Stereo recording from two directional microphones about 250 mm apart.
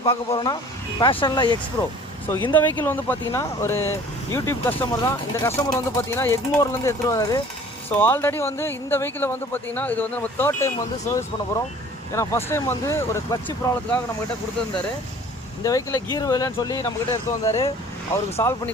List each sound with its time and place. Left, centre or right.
0.0 s speech: left
15.6 s speech: centre